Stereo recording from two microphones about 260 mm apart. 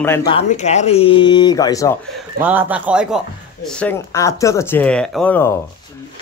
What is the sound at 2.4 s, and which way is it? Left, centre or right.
A man's voice, centre.